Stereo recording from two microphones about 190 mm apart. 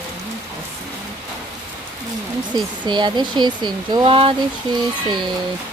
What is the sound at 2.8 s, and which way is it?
Speech, 25° right (ahead or behind).